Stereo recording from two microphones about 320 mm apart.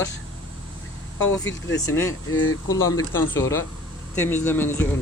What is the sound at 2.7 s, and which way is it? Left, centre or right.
Speech, centre.